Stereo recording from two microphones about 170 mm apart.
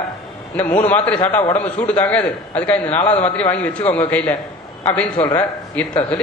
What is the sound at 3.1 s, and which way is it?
Speech, 40° left (ahead or behind).